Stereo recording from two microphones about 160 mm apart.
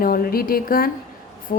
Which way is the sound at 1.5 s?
55° left (ahead or behind).